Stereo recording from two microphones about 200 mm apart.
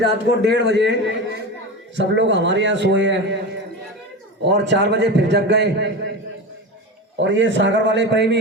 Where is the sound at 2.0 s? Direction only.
65° right (ahead or behind).